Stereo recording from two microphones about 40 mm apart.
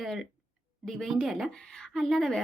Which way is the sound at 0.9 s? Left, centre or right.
Centre.